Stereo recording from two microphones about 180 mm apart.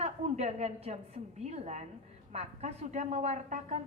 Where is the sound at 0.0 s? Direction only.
35° right (ahead or behind).